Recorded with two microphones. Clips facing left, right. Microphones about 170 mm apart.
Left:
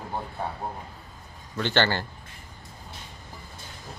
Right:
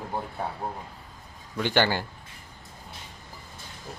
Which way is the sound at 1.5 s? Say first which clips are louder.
Even; 10° right (ahead or behind).